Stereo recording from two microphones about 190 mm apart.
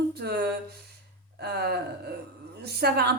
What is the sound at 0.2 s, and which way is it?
A woman's voice, 55° right (ahead or behind).